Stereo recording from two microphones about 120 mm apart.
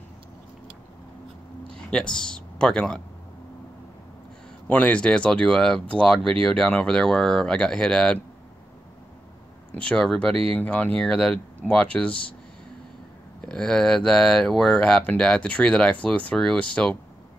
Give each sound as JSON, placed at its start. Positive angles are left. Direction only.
{"t": 1.7, "sound": "speech", "side_deg": 5}
{"t": 4.6, "sound": "speech", "side_deg": 15}
{"t": 9.8, "sound": "speech", "side_deg": 5}
{"t": 13.5, "sound": "speech", "side_deg": 5}